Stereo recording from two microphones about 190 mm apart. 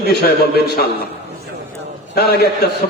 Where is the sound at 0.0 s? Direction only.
55° left (ahead or behind).